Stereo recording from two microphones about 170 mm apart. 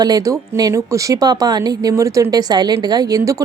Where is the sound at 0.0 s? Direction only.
20° right (ahead or behind).